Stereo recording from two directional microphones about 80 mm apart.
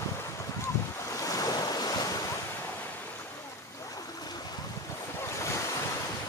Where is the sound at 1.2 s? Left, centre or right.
Left.